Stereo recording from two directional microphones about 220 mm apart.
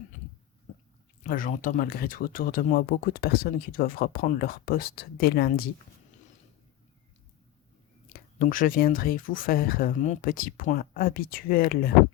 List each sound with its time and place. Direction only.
1.2 s speech: 40° left (ahead or behind)
8.1 s speech: 40° left (ahead or behind)